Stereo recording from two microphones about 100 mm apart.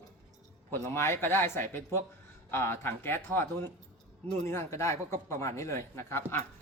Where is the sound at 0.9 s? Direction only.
25° left (ahead or behind).